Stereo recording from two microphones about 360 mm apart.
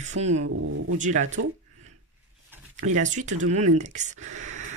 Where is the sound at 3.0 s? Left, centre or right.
Centre.